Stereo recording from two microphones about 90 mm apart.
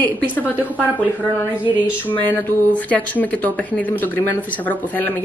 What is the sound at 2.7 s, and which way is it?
Speech, 15° left (ahead or behind).